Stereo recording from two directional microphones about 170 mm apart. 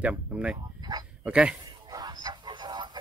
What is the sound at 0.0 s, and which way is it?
Speech, 5° right (ahead or behind).